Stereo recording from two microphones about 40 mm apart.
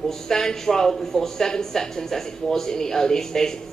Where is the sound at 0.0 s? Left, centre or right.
Centre.